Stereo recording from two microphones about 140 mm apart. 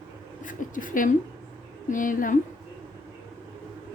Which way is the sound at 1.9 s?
70° left (ahead or behind).